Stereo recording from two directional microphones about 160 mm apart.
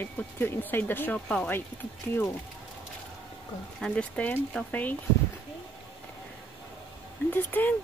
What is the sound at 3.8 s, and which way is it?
Speech, 5° left (ahead or behind).